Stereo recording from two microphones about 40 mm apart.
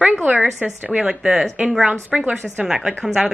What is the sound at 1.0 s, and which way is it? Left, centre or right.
Speech, centre.